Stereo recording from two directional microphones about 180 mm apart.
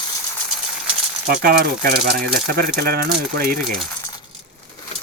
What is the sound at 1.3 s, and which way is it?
Speech, 55° right (ahead or behind).